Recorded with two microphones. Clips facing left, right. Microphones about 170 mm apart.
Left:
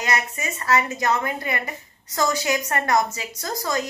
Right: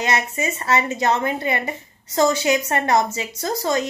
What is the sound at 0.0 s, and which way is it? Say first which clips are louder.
A woman's voice: right 4 dB; 25° right (ahead or behind).